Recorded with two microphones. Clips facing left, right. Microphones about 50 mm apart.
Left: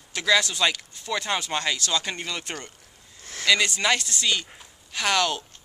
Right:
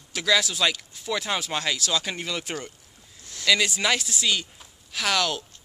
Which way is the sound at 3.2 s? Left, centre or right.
Left.